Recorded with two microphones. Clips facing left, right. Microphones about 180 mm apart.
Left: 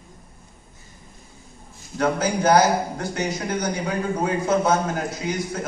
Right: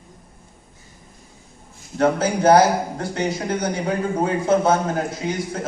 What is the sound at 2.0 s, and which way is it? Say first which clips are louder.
A man's voice: right 3 dB; 30° right (ahead or behind).